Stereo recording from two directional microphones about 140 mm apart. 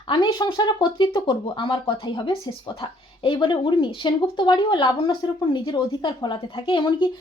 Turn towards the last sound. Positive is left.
turn(degrees=35)  # may be behind; listen again after turning